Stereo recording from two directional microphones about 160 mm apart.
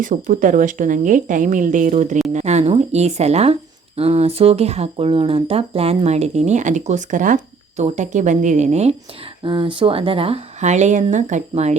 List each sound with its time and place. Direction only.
0.0 s speech: 55° right (ahead or behind)
9.4 s speech: 30° right (ahead or behind)